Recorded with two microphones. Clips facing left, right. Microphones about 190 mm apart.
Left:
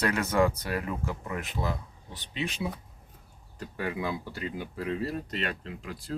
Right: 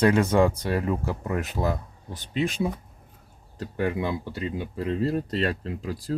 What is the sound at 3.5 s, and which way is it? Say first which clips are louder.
Speech: right 6 dB; 25° right (ahead or behind).